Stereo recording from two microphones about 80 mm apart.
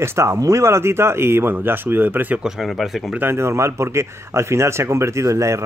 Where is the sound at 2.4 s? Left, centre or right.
Centre.